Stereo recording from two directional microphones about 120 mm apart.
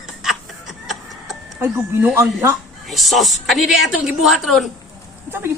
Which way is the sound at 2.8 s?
Centre (ahead or behind).